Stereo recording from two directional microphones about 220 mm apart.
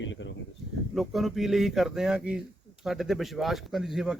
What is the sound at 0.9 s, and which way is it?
Speech, centre (ahead or behind).